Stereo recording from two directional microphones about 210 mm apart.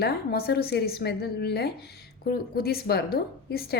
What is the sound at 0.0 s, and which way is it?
A woman's voice, 50° left (ahead or behind).